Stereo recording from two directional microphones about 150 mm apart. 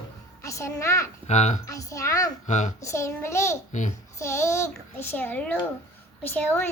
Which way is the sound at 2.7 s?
20° left (ahead or behind).